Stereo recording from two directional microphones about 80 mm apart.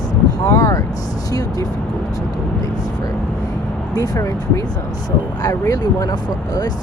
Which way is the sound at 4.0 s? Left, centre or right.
Left.